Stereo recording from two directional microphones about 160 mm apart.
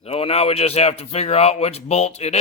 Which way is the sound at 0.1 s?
35° left (ahead or behind).